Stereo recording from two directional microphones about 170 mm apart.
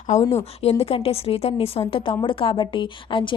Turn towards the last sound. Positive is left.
turn(degrees=30)  # may be behind; listen again after turning